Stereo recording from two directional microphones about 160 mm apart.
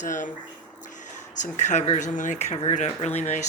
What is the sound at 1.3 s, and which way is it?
Speech, 50° left (ahead or behind).